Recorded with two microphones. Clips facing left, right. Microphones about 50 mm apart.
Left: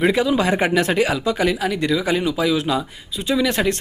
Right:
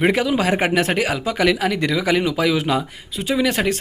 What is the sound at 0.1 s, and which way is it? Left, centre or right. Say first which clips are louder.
Speech: even; right.